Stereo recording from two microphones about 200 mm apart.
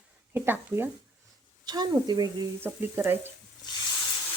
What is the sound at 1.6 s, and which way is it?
Speech, 20° right (ahead or behind).